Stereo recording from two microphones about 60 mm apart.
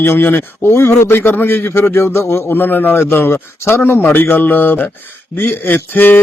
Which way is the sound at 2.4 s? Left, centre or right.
Left.